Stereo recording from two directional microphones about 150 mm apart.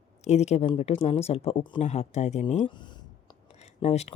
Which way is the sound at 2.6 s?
30° left (ahead or behind).